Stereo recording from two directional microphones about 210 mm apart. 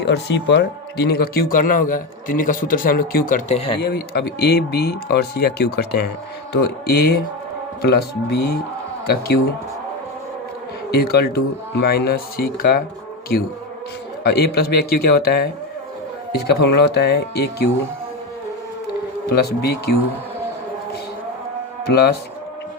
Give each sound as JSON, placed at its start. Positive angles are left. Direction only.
{"t": 0.0, "sound": "speech", "side_deg": 55}
{"t": 3.8, "sound": "speech", "side_deg": 50}
{"t": 10.9, "sound": "speech", "side_deg": 50}
{"t": 14.3, "sound": "speech", "side_deg": 50}
{"t": 19.4, "sound": "speech", "side_deg": 50}
{"t": 21.8, "sound": "speech", "side_deg": 50}